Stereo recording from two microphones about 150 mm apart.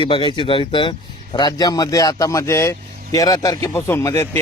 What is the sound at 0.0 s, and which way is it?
Speech, 30° left (ahead or behind).